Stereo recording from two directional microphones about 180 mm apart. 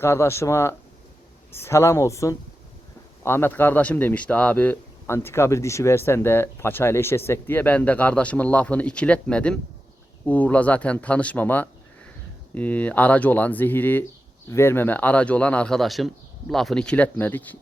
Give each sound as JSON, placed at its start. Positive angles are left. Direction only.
{"t": 0.0, "sound": "a man's voice", "side_deg": 15}